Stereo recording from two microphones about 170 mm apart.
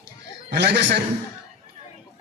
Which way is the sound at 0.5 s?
80° right.